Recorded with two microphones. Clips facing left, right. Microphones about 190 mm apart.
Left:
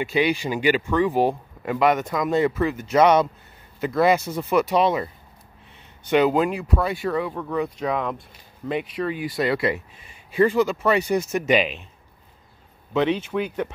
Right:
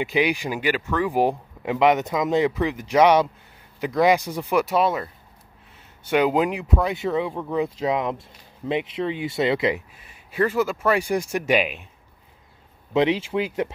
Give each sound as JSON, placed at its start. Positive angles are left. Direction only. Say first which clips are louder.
{"t": 0.0, "sound": "speech", "louder": "left 1 dB", "side_deg": -15}
{"t": 0.6, "sound": "speech", "louder": "left 6 dB", "side_deg": 0}
{"t": 1.1, "sound": "speech", "louder": "even", "side_deg": -15}
{"t": 6.0, "sound": "speech", "louder": "left 1 dB", "side_deg": -10}
{"t": 9.9, "sound": "speech", "louder": "left 4 dB", "side_deg": -5}
{"t": 13.3, "sound": "speech", "louder": "right 1 dB", "side_deg": -25}